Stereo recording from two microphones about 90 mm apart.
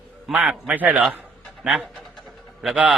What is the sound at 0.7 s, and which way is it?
Speech, 20° right (ahead or behind).